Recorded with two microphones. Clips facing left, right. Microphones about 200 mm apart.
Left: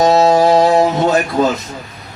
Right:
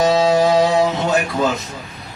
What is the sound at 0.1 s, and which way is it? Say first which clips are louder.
Music: left 4 dB; 45° left (ahead or behind).